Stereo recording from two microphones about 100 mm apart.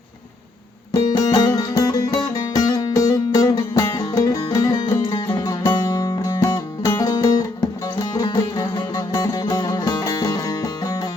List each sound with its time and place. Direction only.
0.9 s music: 40° left (ahead or behind)